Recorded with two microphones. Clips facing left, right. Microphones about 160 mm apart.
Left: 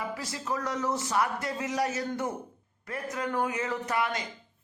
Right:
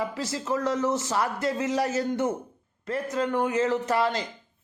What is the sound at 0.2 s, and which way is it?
A man's voice, 25° right (ahead or behind).